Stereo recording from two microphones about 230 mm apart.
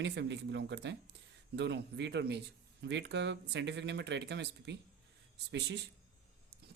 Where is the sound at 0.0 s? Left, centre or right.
Right.